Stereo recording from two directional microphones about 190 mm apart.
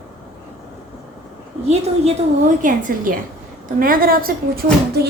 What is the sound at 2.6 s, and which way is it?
Speech, 45° right (ahead or behind).